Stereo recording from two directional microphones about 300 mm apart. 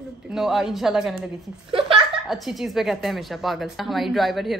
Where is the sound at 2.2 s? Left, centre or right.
Centre.